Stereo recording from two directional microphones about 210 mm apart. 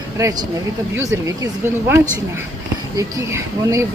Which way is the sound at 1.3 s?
15° right (ahead or behind).